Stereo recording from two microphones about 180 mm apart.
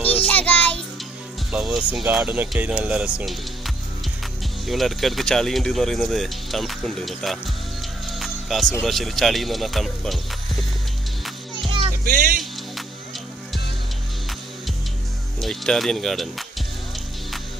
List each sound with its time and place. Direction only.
0.2 s music: 10° left (ahead or behind)
1.5 s speech: 5° right (ahead or behind)
8.1 s music: centre (ahead or behind)
8.8 s speech: centre (ahead or behind)
11.6 s music: 30° right (ahead or behind)
12.0 s speech: 50° right (ahead or behind)
15.4 s speech: centre (ahead or behind)